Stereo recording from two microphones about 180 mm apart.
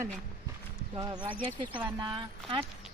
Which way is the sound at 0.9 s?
25° right (ahead or behind).